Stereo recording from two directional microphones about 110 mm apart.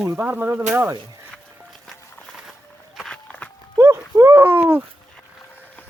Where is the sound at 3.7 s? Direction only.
25° right (ahead or behind).